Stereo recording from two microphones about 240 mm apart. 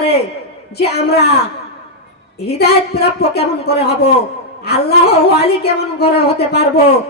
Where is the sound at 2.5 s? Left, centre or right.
Left.